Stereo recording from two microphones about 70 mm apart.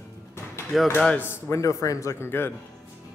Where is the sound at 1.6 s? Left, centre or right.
Left.